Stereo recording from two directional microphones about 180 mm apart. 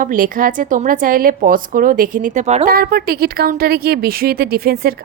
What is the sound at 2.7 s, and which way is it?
A woman's voice, 55° right (ahead or behind).